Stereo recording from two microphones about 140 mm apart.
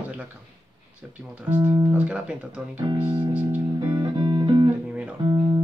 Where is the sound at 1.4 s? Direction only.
10° right (ahead or behind).